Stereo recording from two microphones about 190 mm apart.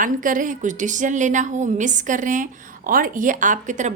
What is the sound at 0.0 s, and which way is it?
A woman's voice, 45° right (ahead or behind).